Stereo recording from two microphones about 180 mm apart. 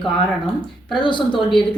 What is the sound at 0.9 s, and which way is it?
Speech, 25° left (ahead or behind).